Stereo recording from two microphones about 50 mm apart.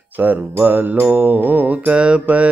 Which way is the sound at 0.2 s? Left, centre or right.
Right.